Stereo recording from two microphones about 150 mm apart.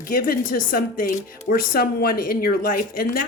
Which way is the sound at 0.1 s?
70° left (ahead or behind).